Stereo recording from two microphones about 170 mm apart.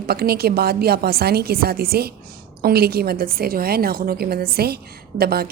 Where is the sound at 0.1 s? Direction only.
65° right (ahead or behind).